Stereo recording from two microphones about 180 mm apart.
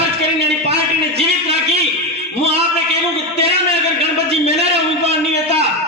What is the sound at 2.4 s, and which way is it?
Speech, 35° right (ahead or behind).